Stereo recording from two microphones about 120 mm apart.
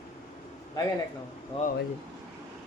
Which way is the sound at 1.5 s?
50° left (ahead or behind).